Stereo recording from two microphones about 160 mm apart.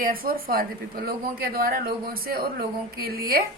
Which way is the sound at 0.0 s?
65° right (ahead or behind).